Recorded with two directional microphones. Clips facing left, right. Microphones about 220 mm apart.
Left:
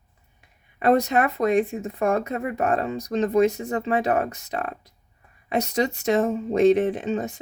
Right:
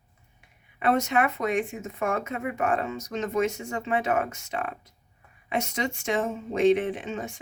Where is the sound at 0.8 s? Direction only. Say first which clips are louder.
Left 4 dB; 35° left (ahead or behind).